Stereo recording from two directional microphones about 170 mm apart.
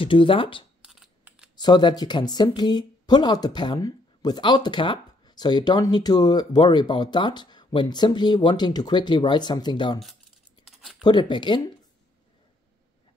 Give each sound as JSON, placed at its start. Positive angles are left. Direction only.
{"t": 0.0, "sound": "speech", "side_deg": 30}
{"t": 0.8, "sound": "typing", "side_deg": -5}
{"t": 1.6, "sound": "speech", "side_deg": 25}
{"t": 10.7, "sound": "scissors", "side_deg": 0}
{"t": 11.1, "sound": "speech", "side_deg": 25}